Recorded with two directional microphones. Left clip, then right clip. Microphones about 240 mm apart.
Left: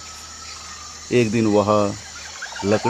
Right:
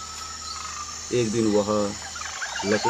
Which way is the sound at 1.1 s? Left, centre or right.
Left.